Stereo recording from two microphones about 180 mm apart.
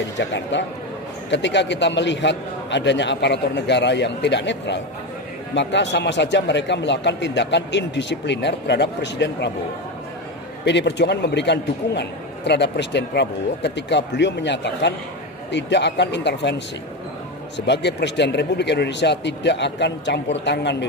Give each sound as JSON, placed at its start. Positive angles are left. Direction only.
{"t": 0.2, "sound": "a man's voice", "side_deg": 80}
{"t": 10.6, "sound": "a man's voice", "side_deg": 75}